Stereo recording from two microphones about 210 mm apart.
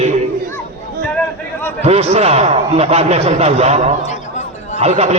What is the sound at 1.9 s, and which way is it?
A man's voice, 30° right (ahead or behind).